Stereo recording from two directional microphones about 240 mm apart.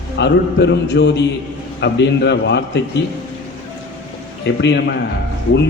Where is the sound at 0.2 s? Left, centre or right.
Left.